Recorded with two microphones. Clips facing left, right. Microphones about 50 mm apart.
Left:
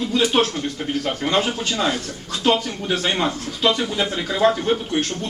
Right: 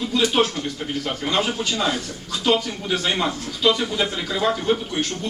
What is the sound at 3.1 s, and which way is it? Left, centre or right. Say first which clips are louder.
Speech: left 1 dB; centre.